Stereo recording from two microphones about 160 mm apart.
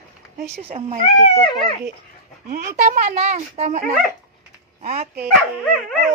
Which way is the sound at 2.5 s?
50° right (ahead or behind).